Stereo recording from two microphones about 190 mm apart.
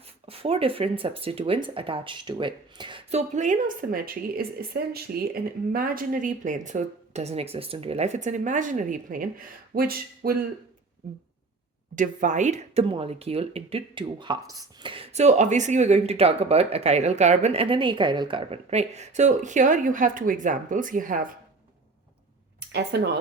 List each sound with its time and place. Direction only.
0.3 s speech: 30° right (ahead or behind); by 10.3 s 50° right (ahead or behind)
11.9 s speech: 40° right (ahead or behind)
22.7 s speech: 65° right (ahead or behind)